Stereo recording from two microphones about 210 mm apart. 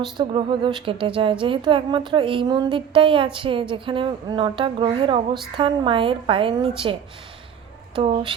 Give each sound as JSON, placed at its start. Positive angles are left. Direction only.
{"t": 0.2, "sound": "speech", "side_deg": -20}
{"t": 7.9, "sound": "speech", "side_deg": -25}